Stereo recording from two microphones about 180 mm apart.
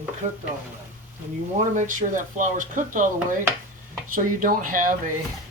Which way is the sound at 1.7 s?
45° right (ahead or behind).